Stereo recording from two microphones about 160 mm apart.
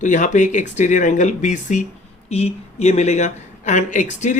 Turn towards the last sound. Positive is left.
turn(degrees=50)  # may be behind; listen again after turning